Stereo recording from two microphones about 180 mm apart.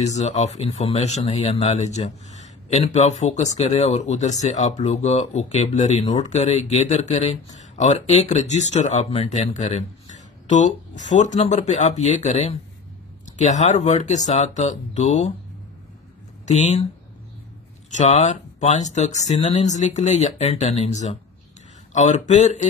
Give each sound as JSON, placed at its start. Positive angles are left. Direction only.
{"t": 0.0, "sound": "speech", "side_deg": 35}
{"t": 16.4, "sound": "speech", "side_deg": 40}
{"t": 17.8, "sound": "speech", "side_deg": 40}